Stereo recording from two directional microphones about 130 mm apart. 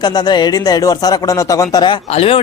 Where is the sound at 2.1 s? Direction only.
50° left (ahead or behind).